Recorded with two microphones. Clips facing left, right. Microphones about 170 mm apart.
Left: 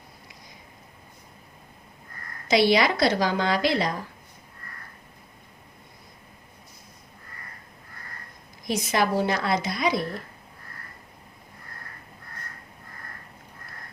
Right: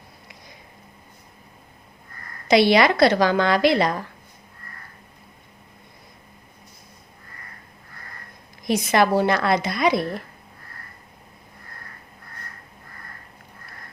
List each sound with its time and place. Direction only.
2.5 s a woman's voice: 65° right (ahead or behind)
8.6 s a woman's voice: 65° right (ahead or behind)